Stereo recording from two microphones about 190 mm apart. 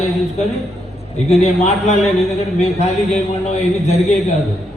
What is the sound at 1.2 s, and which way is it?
Speech, 35° left (ahead or behind).